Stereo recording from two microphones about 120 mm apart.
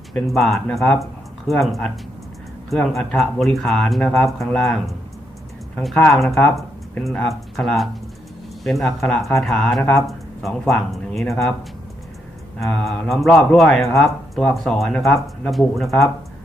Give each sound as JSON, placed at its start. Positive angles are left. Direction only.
{"t": 0.1, "sound": "speech", "side_deg": 0}
{"t": 12.5, "sound": "speech", "side_deg": 0}